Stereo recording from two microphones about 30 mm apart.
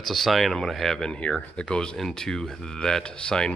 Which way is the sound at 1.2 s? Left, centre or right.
Left.